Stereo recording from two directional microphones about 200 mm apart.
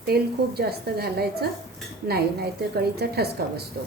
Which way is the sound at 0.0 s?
50° right (ahead or behind).